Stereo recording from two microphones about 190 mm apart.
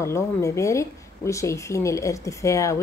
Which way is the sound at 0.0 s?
15° left (ahead or behind).